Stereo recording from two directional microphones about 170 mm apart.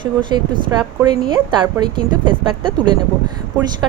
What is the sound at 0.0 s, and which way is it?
A woman's voice, 25° right (ahead or behind).